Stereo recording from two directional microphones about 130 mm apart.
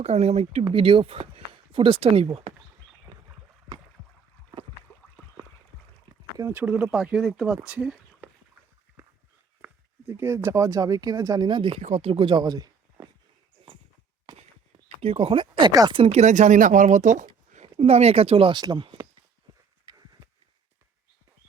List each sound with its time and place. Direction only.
0.0 s speech: 55° right (ahead or behind)
0.7 s speech: 45° right (ahead or behind)
4.9 s a sound: 20° left (ahead or behind)
6.1 s a sound: 30° right (ahead or behind)
6.5 s speech: 10° right (ahead or behind)
10.1 s speech: 20° right (ahead or behind); by 11.8 s 35° right (ahead or behind)
11.8 s speech: 55° right (ahead or behind); by 13.1 s 30° right (ahead or behind)
14.8 s speech: 50° right (ahead or behind); by 15.9 s 30° right (ahead or behind)
15.9 s speech: 45° right (ahead or behind)
16.2 s speech: 65° right (ahead or behind)
17.5 s speech: 55° right (ahead or behind); by 19.0 s 35° right (ahead or behind)